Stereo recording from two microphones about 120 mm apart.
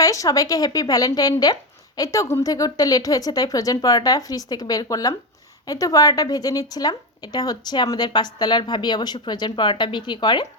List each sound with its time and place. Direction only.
0.0 s a woman's voice: 30° left (ahead or behind)